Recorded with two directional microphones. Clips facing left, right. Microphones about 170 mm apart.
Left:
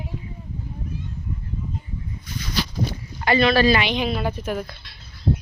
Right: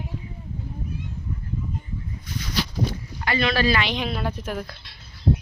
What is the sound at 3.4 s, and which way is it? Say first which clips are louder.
Speech: left 5 dB; 35° left (ahead or behind).